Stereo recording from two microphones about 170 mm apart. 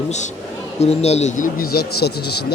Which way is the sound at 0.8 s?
40° left (ahead or behind).